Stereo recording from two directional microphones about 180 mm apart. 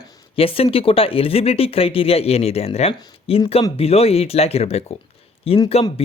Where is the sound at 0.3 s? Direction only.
30° left (ahead or behind).